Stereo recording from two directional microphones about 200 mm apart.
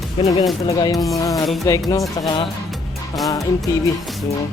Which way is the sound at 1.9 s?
20° left (ahead or behind).